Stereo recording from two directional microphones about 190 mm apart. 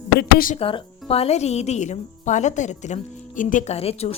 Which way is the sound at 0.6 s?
30° left (ahead or behind).